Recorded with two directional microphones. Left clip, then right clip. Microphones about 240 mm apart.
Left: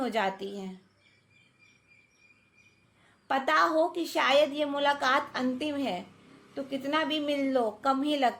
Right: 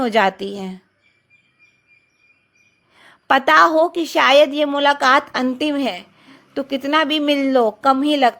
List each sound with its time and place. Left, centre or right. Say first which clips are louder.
0.0 s a woman's voice: right 13 dB; right
3.0 s a woman's voice: right 14 dB; right